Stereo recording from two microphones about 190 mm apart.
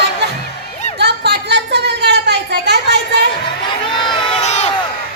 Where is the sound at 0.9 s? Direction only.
60° right (ahead or behind).